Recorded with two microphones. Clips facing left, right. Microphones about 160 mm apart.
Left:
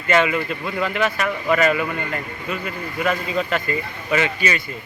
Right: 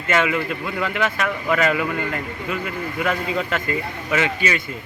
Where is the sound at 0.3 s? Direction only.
20° left (ahead or behind).